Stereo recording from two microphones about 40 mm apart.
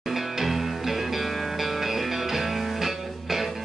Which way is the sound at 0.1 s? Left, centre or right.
Centre.